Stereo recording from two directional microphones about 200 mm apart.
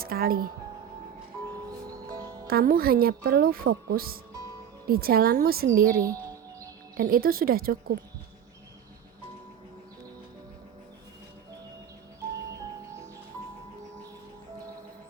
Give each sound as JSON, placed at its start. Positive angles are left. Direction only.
{"t": 0.0, "sound": "speech", "side_deg": -50}
{"t": 2.5, "sound": "speech", "side_deg": -45}